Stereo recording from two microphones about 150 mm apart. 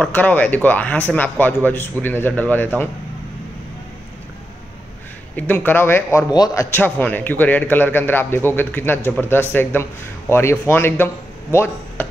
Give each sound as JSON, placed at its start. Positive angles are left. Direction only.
{"t": 0.0, "sound": "a man's voice", "side_deg": 10}
{"t": 5.3, "sound": "a man's voice", "side_deg": 10}